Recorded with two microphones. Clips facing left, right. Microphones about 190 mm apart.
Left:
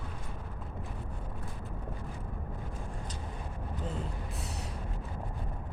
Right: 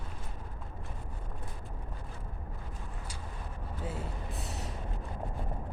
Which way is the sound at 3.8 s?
5° right (ahead or behind).